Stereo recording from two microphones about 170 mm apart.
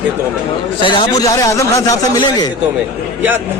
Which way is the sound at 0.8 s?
30° left (ahead or behind).